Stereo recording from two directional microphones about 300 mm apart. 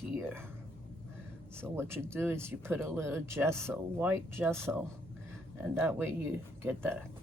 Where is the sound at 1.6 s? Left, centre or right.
Centre.